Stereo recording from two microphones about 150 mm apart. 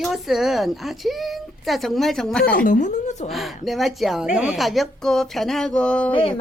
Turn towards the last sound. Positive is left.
turn(degrees=35)  # may be behind; listen again after turning